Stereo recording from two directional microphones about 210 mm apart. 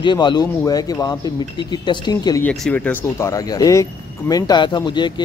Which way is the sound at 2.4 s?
5° left (ahead or behind).